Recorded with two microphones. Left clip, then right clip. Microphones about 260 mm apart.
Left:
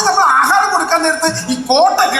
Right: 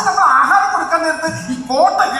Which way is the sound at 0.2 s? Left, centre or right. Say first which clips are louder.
Right 1 dB; left.